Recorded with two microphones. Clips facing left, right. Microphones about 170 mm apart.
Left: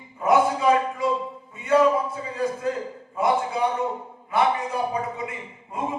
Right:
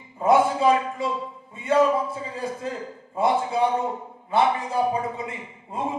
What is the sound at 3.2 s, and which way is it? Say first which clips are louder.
Speech: right 1 dB; 30° right (ahead or behind).